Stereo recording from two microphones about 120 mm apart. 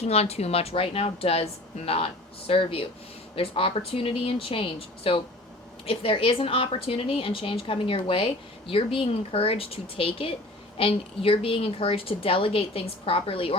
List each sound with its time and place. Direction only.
0.0 s a woman's voice: 60° left (ahead or behind)